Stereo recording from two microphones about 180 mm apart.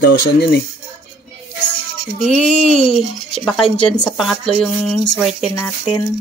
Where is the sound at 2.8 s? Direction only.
Centre (ahead or behind).